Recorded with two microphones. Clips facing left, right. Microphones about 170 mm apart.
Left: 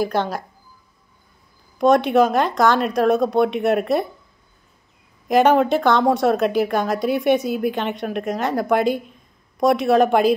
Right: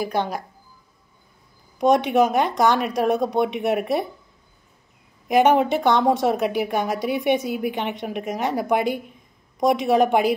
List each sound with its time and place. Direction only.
0.0 s a woman's voice: 15° right (ahead or behind)
1.8 s a woman's voice: 15° right (ahead or behind)
5.3 s a woman's voice: 15° right (ahead or behind)